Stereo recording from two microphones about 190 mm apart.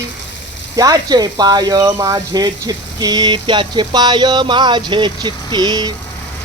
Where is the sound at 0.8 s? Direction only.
20° right (ahead or behind).